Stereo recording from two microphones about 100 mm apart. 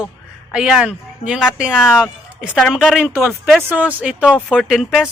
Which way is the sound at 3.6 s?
15° right (ahead or behind).